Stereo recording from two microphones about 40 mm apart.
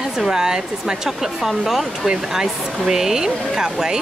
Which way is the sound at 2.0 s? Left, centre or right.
Centre.